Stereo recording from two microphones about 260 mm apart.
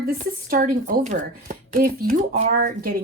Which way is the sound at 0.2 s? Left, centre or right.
Right.